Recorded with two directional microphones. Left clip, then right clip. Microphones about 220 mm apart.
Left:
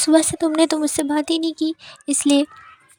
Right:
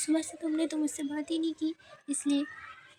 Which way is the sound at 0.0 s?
45° left (ahead or behind).